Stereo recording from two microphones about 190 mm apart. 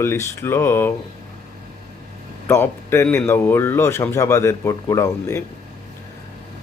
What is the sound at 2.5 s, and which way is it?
Speech, 15° left (ahead or behind).